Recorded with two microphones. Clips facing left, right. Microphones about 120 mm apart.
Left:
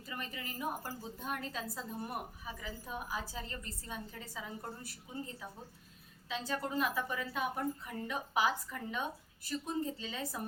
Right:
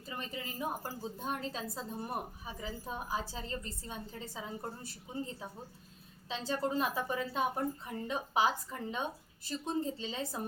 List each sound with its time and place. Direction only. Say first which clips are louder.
0.1 s a woman's voice: right 2 dB; 25° right (ahead or behind)